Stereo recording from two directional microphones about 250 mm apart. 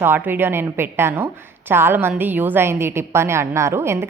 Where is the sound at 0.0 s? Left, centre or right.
Centre.